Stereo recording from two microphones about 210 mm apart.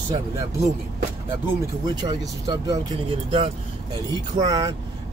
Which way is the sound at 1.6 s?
20° right (ahead or behind).